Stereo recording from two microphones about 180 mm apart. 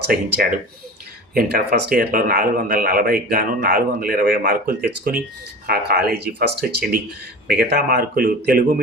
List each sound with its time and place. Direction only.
0.1 s speech: 55° right (ahead or behind)
1.3 s speech: 55° right (ahead or behind)